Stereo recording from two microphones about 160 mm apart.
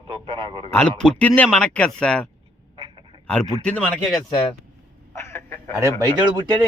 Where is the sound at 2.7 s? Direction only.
30° right (ahead or behind).